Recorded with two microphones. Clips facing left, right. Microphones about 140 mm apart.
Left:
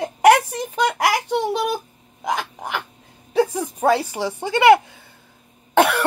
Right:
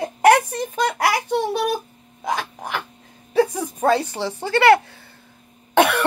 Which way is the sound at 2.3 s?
10° left (ahead or behind).